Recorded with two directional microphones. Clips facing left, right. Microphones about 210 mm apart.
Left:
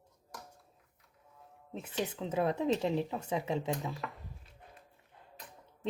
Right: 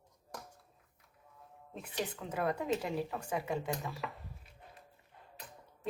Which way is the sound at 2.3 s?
25° left (ahead or behind).